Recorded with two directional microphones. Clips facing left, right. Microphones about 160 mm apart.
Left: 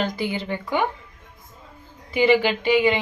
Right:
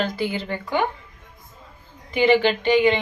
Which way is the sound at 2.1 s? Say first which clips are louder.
Right 1 dB; 10° left (ahead or behind).